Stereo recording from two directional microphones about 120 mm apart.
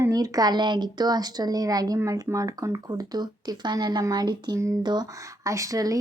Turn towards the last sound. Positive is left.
turn(degrees=-30)  # may be behind; listen again after turning